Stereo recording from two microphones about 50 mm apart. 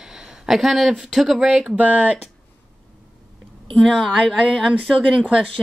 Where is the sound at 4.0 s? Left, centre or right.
Centre.